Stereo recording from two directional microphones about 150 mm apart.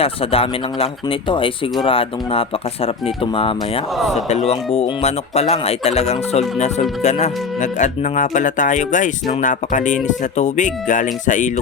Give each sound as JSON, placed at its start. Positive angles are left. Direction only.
{"t": 0.0, "sound": "speech", "side_deg": 40}
{"t": 3.9, "sound": "speech", "side_deg": 0}
{"t": 4.3, "sound": "speech", "side_deg": 45}